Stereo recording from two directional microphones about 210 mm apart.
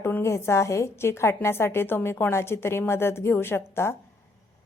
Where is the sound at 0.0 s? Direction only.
10° left (ahead or behind).